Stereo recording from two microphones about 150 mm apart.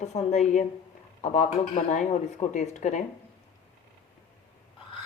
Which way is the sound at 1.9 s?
55° left (ahead or behind).